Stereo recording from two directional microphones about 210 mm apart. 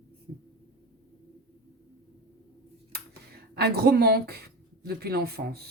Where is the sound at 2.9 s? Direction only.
50° right (ahead or behind).